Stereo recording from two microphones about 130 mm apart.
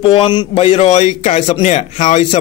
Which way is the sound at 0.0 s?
40° left (ahead or behind).